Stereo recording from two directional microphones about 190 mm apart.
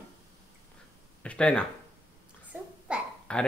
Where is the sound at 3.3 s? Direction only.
5° left (ahead or behind).